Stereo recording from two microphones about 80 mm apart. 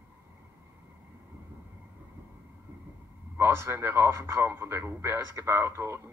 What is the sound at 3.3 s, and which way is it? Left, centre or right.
Speech, right.